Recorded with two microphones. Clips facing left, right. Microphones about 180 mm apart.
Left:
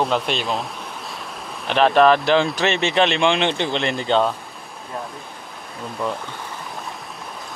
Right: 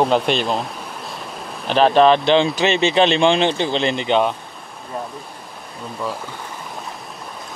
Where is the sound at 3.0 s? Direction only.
35° right (ahead or behind).